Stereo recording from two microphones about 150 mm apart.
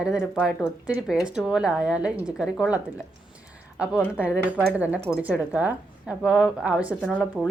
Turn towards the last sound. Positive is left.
turn(degrees=-10)  # may be behind; listen again after turning